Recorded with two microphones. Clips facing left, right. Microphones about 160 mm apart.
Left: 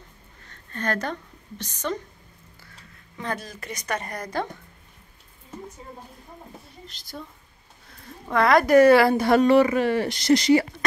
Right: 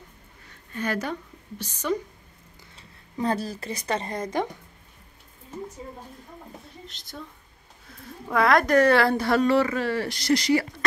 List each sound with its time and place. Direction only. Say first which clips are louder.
0.5 s a sound: left 1 dB; 10° right (ahead or behind)
1.6 s a woman's voice: right 2 dB; 10° right (ahead or behind)
3.2 s a woman's voice: right 5 dB; 35° right (ahead or behind)
6.9 s a woman's voice: left 3 dB; centre (ahead or behind)
8.3 s a woman's voice: left 2 dB; centre (ahead or behind); by 10.7 s 20° left (ahead or behind)